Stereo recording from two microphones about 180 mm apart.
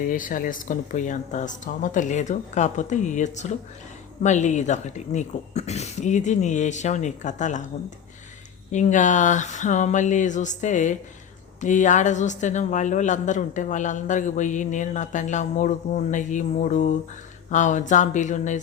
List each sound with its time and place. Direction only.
0.0 s speech: 50° left (ahead or behind)